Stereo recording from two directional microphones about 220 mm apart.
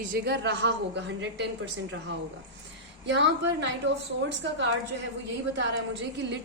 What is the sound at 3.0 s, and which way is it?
Speech, 55° right (ahead or behind).